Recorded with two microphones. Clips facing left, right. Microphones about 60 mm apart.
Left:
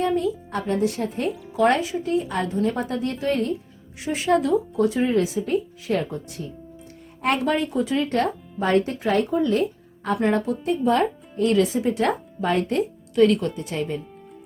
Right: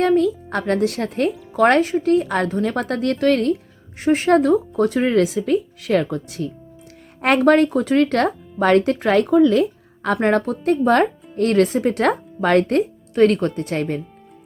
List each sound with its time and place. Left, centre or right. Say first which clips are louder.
0.0 s a woman's voice: right 6 dB; right
1.5 s a woman's voice: right 5 dB; right
4.0 s speech: right 6 dB; right
7.2 s speech: right 8 dB; right
10.2 s speech: right 3 dB; right